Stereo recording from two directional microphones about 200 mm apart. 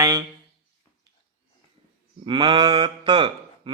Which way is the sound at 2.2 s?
25° right (ahead or behind).